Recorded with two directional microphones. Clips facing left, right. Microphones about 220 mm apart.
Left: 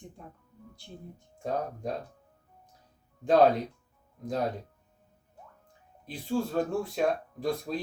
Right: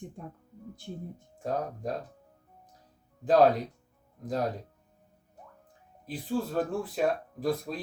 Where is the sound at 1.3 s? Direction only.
Centre (ahead or behind).